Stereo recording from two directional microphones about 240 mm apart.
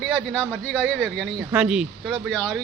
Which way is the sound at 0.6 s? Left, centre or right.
Centre.